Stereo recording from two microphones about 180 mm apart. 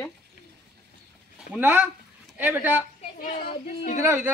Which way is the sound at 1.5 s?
10° right (ahead or behind).